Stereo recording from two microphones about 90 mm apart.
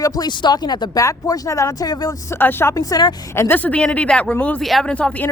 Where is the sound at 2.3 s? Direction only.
25° left (ahead or behind).